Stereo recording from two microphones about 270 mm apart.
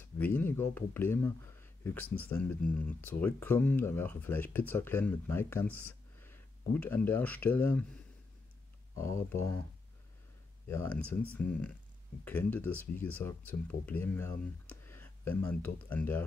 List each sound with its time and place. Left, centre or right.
0.0 s speech: centre
9.3 s speech: centre
10.7 s speech: centre